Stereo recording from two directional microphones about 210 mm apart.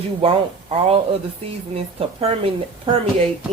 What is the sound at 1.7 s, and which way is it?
Speech, 30° right (ahead or behind).